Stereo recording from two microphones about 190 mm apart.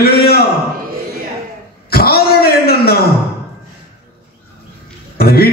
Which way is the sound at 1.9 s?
55° left (ahead or behind).